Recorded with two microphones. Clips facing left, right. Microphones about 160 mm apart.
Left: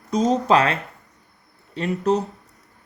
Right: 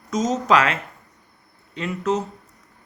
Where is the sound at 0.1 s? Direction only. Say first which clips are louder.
Left 2 dB; 30° left (ahead or behind).